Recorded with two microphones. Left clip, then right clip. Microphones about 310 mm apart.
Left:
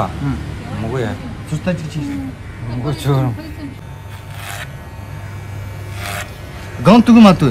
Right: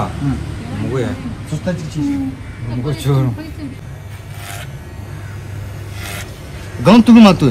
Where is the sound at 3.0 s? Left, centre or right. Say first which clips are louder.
Left 1 dB; left.